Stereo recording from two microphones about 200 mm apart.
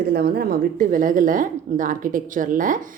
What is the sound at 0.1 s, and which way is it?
Speech, 50° right (ahead or behind).